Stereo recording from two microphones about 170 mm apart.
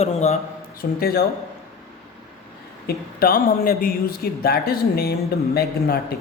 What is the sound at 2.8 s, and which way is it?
A man's voice, 65° left (ahead or behind).